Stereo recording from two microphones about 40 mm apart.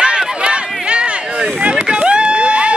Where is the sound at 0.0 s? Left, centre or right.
Right.